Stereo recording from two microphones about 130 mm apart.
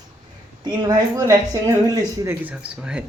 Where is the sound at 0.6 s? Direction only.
30° right (ahead or behind).